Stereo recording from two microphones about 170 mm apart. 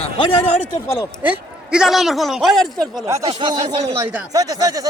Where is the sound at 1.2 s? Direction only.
5° right (ahead or behind).